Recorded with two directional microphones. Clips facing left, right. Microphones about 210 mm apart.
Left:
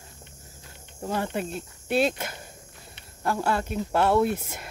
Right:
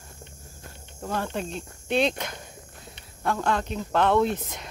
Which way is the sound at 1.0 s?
10° left (ahead or behind).